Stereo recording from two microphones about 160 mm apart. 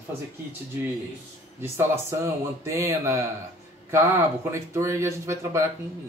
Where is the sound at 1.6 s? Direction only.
15° right (ahead or behind).